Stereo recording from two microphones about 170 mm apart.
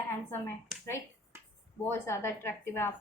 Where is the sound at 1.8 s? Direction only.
15° left (ahead or behind).